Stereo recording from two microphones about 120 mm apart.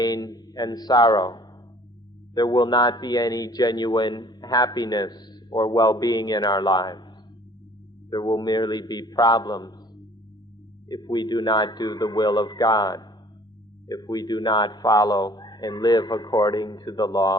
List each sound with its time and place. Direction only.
0.0 s a man's voice: 30° left (ahead or behind)
8.1 s a man's voice: 35° left (ahead or behind)
10.8 s a man's voice: 35° left (ahead or behind)